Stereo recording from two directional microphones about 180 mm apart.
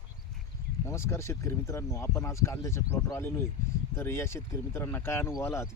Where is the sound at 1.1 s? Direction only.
15° left (ahead or behind).